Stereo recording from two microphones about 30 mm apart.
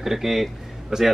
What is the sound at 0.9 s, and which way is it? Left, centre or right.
Speech, centre.